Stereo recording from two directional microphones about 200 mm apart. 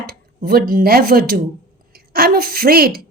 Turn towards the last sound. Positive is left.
turn(degrees=-50)  # may be behind; listen again after turning